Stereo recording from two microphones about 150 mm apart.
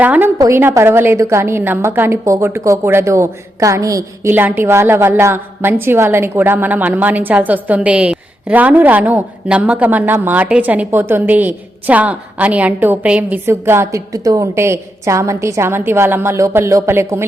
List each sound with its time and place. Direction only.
0.0 s a woman's voice: 10° right (ahead or behind)